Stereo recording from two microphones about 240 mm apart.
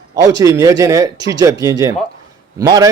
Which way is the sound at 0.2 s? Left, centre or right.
Centre.